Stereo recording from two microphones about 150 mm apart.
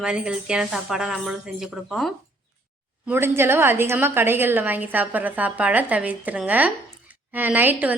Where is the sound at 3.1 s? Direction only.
15° right (ahead or behind).